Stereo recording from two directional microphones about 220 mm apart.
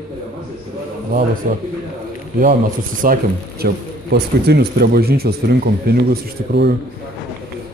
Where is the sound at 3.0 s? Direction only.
40° right (ahead or behind).